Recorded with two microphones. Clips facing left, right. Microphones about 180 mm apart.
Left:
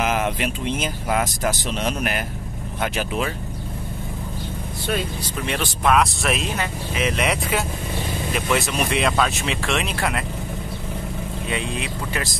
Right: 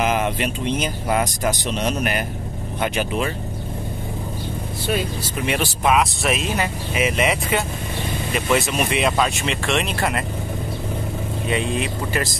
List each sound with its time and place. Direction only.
0.0 s speech: centre (ahead or behind)
5.9 s speech: centre (ahead or behind)
11.4 s speech: centre (ahead or behind)